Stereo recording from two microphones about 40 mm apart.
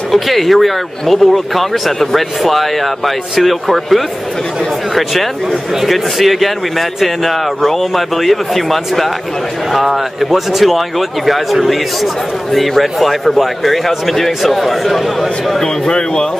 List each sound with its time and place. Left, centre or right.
0.1 s speech: centre
15.6 s a man's voice: centre